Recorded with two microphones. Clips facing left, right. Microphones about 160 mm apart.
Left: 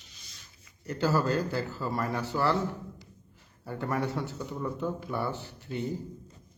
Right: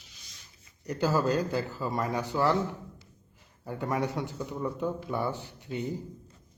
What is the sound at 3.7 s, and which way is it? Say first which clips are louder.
A man's voice: right 1 dB; 15° right (ahead or behind).